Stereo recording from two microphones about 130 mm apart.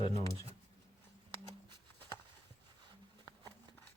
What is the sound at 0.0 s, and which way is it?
Shuffling cards, 50° left (ahead or behind).